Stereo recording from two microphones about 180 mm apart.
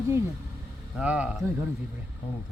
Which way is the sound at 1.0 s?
5° right (ahead or behind).